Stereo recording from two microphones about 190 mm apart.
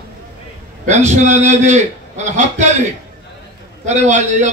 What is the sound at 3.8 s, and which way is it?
Speech, 35° right (ahead or behind).